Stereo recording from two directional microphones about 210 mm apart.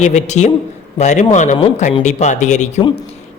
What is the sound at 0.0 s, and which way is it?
A man's voice, 35° left (ahead or behind).